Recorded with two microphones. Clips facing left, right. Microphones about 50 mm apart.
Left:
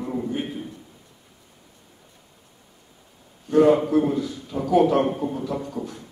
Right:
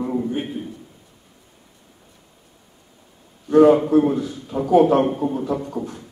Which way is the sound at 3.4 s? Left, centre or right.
Right.